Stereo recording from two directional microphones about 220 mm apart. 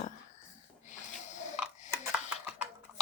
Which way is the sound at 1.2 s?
35° left (ahead or behind).